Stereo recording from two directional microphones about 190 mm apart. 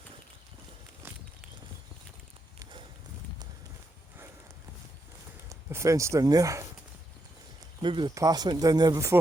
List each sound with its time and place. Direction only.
5.5 s speech: 15° right (ahead or behind)
7.8 s speech: 25° right (ahead or behind)